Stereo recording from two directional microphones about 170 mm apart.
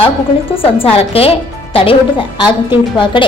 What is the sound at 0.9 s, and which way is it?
A woman's voice, 35° left (ahead or behind).